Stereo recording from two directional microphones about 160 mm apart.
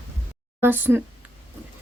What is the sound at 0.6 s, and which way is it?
Speech, 15° right (ahead or behind).